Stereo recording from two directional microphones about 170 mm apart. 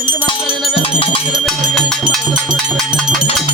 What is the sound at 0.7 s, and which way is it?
Music, 35° left (ahead or behind).